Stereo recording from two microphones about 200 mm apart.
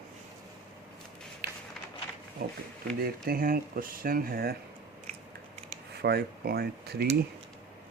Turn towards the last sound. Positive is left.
turn(degrees=-55)  # may be behind; listen again after turning